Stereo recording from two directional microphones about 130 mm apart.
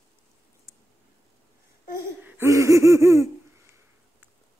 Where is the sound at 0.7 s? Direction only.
25° right (ahead or behind).